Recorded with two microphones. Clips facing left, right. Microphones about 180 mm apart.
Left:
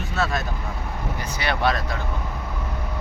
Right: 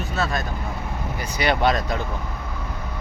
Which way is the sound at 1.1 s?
15° right (ahead or behind).